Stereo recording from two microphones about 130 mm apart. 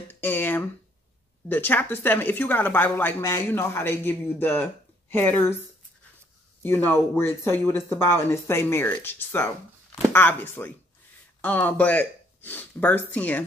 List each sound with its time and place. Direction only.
0.1 s a sound: 15° left (ahead or behind)
1.5 s speech: 15° left (ahead or behind)
6.6 s speech: 15° left (ahead or behind)